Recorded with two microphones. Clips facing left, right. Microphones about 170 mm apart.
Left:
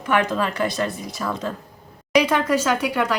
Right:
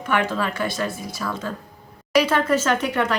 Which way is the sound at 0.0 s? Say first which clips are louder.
Left 2 dB; 15° left (ahead or behind).